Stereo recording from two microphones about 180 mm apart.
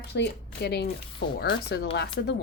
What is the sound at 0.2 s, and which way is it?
Speech, 70° left (ahead or behind).